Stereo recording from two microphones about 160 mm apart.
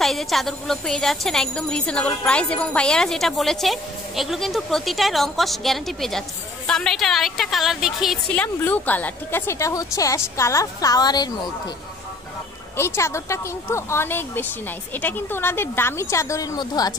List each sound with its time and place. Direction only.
0.0 s speech: centre (ahead or behind)
8.4 s a woman's voice: 10° left (ahead or behind); by 11.3 s 25° left (ahead or behind)
12.7 s speech: 15° left (ahead or behind)